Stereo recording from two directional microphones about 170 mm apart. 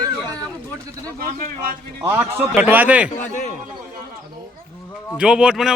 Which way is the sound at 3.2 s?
45° left (ahead or behind).